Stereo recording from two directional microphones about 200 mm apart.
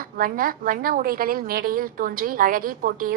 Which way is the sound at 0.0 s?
45° right (ahead or behind).